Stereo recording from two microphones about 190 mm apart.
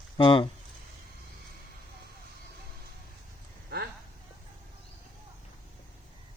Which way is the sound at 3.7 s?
55° right (ahead or behind).